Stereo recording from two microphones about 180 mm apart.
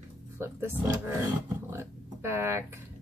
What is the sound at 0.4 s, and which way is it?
Speech, 15° right (ahead or behind).